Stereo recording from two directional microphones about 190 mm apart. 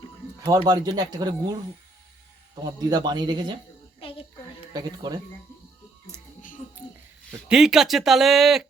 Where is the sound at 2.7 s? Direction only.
20° right (ahead or behind).